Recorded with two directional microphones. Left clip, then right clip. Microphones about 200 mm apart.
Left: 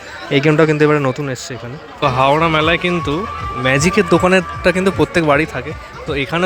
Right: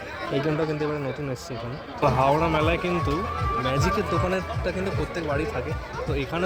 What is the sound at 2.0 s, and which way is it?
A man's voice, 15° left (ahead or behind).